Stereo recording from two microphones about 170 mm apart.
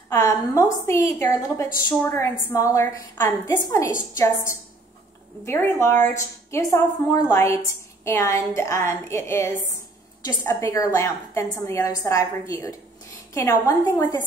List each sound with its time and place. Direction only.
0.1 s a woman's voice: 15° left (ahead or behind)